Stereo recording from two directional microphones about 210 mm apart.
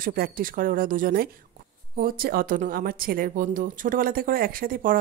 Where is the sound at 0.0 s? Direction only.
45° right (ahead or behind).